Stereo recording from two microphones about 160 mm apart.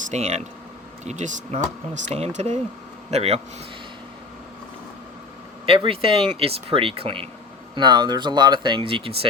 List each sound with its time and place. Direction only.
0.1 s speech: 45° right (ahead or behind)
5.6 s speech: 35° right (ahead or behind)